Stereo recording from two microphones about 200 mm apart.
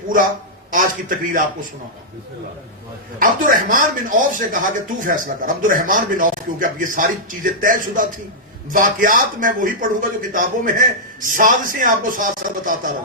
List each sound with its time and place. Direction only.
0.7 s a man's voice: 45° right (ahead or behind)
3.2 s a man's voice: 45° right (ahead or behind)